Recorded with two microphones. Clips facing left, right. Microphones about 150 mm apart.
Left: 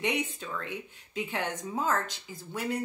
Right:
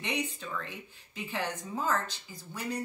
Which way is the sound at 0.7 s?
20° left (ahead or behind).